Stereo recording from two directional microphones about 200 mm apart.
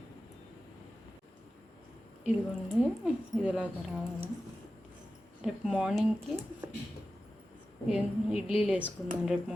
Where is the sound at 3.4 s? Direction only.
5° right (ahead or behind).